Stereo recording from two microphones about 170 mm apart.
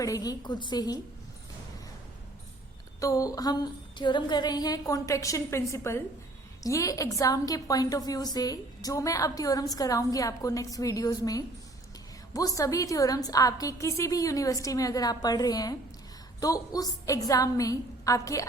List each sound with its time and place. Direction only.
0.0 s a woman's voice: 20° left (ahead or behind)
3.0 s a woman's voice: 20° left (ahead or behind)